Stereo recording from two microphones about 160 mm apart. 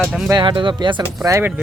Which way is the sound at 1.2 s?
20° right (ahead or behind).